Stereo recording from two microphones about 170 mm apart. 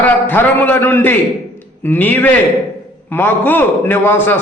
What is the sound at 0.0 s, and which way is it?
A man's voice, 10° left (ahead or behind).